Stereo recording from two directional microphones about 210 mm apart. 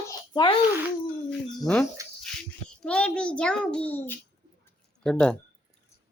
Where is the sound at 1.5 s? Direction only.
5° left (ahead or behind).